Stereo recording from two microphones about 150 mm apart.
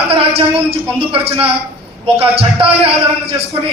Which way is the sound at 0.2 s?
40° right (ahead or behind).